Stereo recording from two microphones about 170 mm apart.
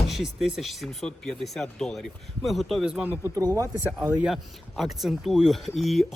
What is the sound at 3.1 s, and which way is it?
Speech, 15° right (ahead or behind).